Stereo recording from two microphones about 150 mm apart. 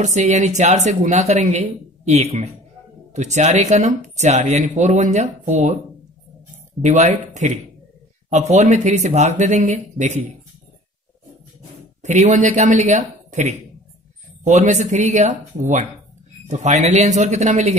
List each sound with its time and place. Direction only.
0.0 s speech: 50° right (ahead or behind)
6.8 s speech: 50° right (ahead or behind)
12.0 s speech: 50° right (ahead or behind)